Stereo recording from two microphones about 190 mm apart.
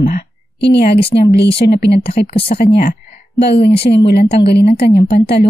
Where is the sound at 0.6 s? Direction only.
65° left (ahead or behind).